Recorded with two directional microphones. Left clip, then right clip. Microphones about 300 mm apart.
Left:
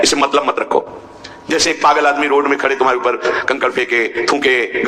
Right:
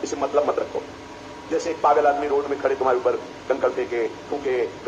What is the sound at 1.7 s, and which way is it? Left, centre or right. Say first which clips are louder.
A man's voice: left 5 dB; left.